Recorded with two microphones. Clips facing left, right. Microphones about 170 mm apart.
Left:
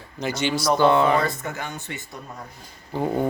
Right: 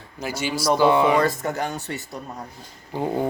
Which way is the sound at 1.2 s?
40° right (ahead or behind).